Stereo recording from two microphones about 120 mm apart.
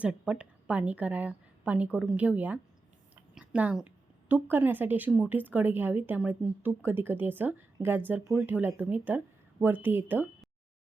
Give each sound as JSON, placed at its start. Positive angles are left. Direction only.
{"t": 0.0, "sound": "a woman's voice", "side_deg": -10}